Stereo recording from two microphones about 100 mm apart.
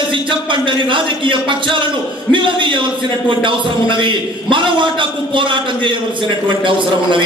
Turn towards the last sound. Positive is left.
turn(degrees=-55)  # may be behind; listen again after turning